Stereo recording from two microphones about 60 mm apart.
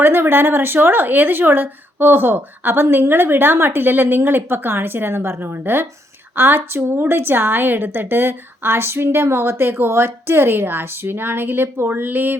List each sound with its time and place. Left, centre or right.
0.0 s a woman's voice: right